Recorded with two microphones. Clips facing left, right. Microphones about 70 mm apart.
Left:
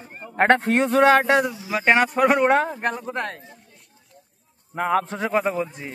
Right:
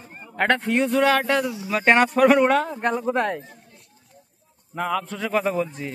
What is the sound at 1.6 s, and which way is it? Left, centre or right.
Speech, centre.